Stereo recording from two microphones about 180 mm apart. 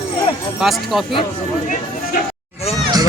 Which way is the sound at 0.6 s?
Centre (ahead or behind).